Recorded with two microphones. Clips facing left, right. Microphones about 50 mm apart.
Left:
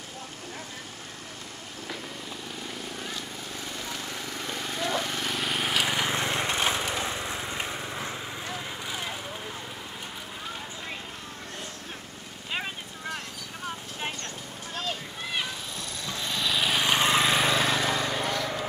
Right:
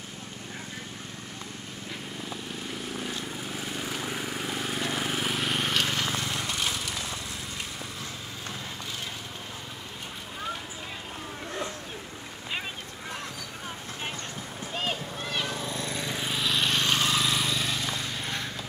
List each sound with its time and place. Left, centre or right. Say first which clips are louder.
3.5 s vehicle: right 2 dB; centre
6.0 s wood: left 3 dB; left
15.7 s lawn mower: right 4 dB; right
16.3 s a sound: left 1 dB; centre
16.9 s vehicle: left 3 dB; left
17.5 s lawn mower: left 6 dB; left
18.0 s a sound: left 5 dB; left